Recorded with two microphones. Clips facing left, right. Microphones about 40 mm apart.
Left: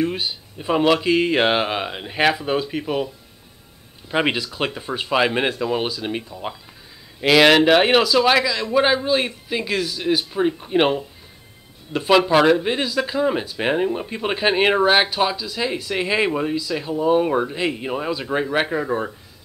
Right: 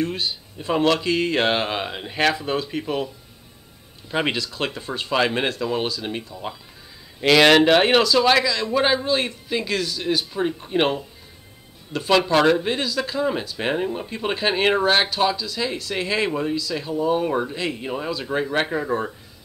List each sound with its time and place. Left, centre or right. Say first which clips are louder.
0.0 s speech: left 2 dB; centre
4.1 s speech: left 3 dB; centre